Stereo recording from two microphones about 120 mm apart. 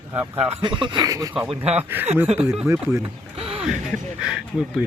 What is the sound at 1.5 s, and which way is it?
Speech, 60° right (ahead or behind).